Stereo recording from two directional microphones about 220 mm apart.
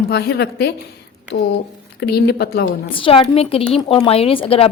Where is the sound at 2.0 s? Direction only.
45° left (ahead or behind).